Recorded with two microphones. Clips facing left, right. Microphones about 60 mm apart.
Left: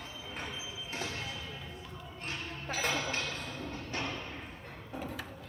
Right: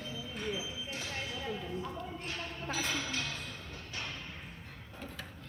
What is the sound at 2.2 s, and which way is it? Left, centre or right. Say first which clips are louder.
Music: left 4 dB; left.